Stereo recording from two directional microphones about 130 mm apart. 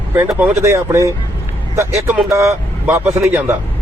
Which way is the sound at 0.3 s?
20° right (ahead or behind).